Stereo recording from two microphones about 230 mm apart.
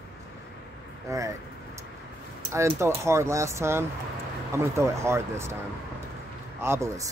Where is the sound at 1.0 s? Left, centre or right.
Centre.